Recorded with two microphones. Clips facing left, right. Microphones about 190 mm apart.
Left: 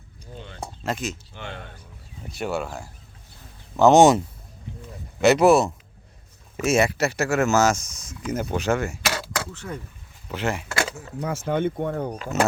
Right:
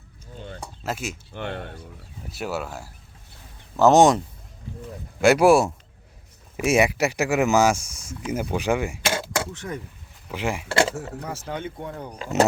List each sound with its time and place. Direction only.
0.9 s speech: 5° right (ahead or behind)
1.3 s speech: 55° right (ahead or behind)
2.3 s speech: 5° right (ahead or behind)
5.2 s speech: 10° right (ahead or behind)
9.0 s a sound: 25° right (ahead or behind)
10.2 s speech: 10° right (ahead or behind)
10.7 s a sound: 30° right (ahead or behind)
11.2 s speech: 55° left (ahead or behind)
12.3 s speech: 20° right (ahead or behind)